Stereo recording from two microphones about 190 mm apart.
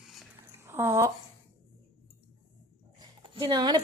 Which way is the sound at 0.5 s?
15° right (ahead or behind).